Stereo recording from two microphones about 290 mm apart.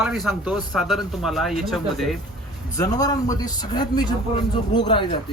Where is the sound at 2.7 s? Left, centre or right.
Centre.